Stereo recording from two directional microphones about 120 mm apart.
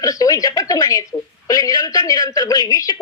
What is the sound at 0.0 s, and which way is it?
A woman's voice, 30° left (ahead or behind).